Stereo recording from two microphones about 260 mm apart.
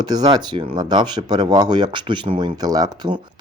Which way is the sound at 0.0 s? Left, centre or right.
Centre.